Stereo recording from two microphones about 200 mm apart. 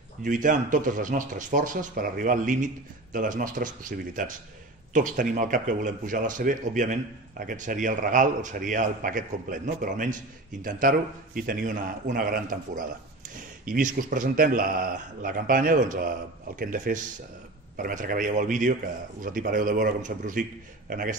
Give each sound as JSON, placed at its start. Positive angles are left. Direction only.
{"t": 0.2, "sound": "a man's voice", "side_deg": -40}